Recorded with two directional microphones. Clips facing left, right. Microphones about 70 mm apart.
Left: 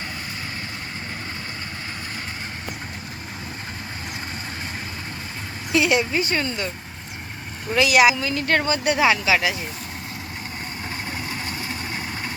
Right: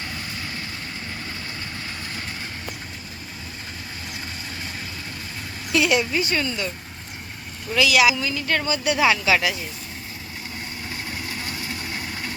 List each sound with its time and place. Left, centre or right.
5.7 s a woman's voice: left
7.8 s a woman's voice: left
9.0 s a woman's voice: centre
11.4 s vehicle: left